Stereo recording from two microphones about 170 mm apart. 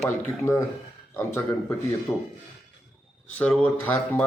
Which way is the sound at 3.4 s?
10° left (ahead or behind).